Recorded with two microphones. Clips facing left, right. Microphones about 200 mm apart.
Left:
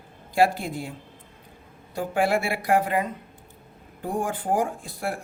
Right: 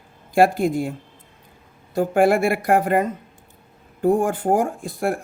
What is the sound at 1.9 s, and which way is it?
Speech, 45° right (ahead or behind).